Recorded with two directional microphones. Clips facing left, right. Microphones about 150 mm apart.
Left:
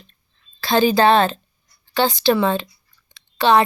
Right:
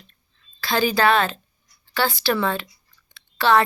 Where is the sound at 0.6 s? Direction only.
25° left (ahead or behind).